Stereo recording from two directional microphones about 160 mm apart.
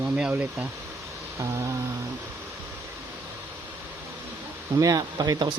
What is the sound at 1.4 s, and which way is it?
Speech, 20° right (ahead or behind).